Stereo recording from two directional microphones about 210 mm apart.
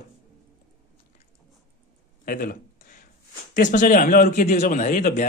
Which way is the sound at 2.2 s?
45° left (ahead or behind).